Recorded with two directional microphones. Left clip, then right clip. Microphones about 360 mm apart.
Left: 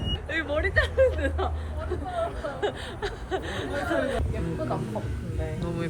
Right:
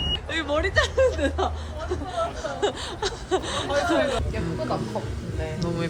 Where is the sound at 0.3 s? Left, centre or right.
Centre.